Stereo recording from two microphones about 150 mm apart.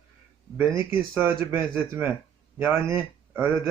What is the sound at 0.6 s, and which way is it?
Speech, 15° right (ahead or behind).